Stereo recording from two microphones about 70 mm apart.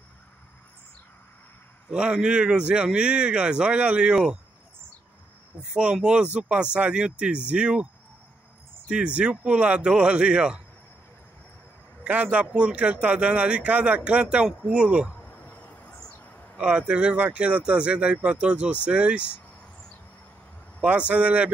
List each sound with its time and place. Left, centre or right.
1.9 s a man's voice: centre
5.6 s a man's voice: centre
12.0 s a man's voice: centre
15.2 s a sound: left
16.5 s a man's voice: centre
21.1 s a man's voice: centre